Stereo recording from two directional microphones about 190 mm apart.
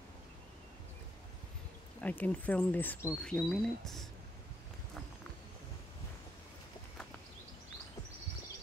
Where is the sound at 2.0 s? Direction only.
10° left (ahead or behind).